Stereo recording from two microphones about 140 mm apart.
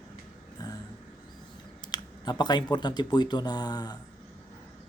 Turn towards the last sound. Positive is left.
turn(degrees=30)  # may be behind; listen again after turning